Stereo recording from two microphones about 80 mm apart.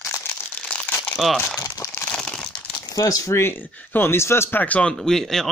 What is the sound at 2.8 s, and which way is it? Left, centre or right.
Speech, left.